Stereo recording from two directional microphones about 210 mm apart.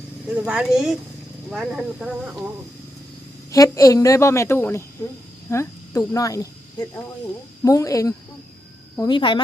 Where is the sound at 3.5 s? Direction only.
15° left (ahead or behind).